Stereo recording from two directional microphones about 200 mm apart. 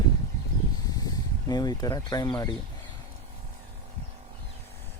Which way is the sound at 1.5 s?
20° left (ahead or behind).